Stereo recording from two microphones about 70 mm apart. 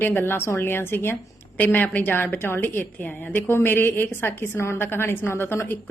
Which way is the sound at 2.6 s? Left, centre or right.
Left.